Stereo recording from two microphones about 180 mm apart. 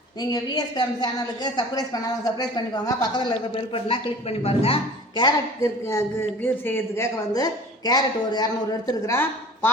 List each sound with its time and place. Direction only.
0.2 s a woman's voice: 20° left (ahead or behind)